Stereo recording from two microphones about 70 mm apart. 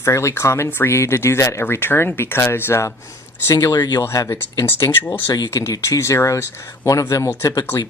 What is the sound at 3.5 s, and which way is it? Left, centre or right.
Speech, left.